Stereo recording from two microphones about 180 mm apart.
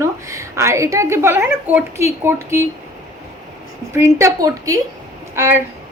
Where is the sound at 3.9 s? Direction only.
15° right (ahead or behind).